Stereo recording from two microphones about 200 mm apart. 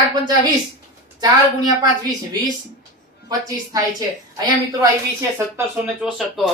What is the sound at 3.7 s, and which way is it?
Speech, 20° right (ahead or behind).